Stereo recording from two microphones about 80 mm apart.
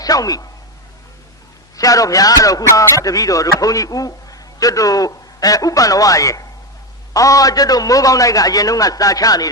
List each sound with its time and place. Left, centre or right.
0.0 s speech: left
1.7 s a man's voice: left